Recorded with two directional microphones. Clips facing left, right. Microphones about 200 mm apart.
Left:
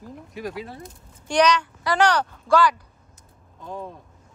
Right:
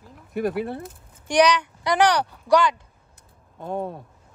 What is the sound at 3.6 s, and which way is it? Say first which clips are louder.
Speech: right 6 dB; 55° right (ahead or behind).